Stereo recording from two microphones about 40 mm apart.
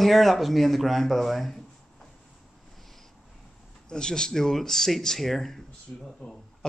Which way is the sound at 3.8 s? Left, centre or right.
Centre.